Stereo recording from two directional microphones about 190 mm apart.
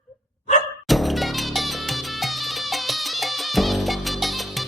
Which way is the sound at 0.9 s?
Centre (ahead or behind).